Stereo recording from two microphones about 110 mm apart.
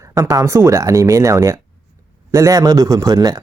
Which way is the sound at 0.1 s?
30° right (ahead or behind).